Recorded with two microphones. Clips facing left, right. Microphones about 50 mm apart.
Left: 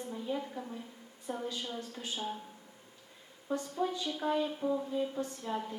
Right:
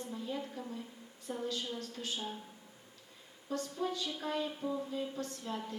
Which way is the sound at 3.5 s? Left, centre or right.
Centre.